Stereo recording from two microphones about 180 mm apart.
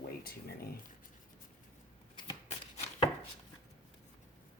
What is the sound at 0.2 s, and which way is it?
Speech, 55° left (ahead or behind).